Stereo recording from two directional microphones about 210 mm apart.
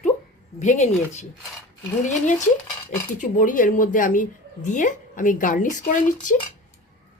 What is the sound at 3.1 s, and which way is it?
Speech, 40° left (ahead or behind).